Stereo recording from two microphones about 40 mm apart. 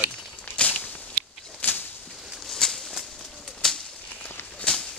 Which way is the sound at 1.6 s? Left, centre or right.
Left.